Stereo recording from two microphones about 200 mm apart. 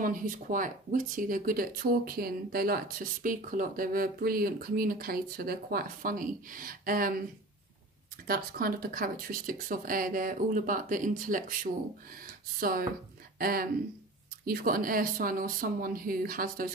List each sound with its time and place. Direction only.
0.0 s speech: 40° right (ahead or behind)
8.3 s speech: 45° right (ahead or behind)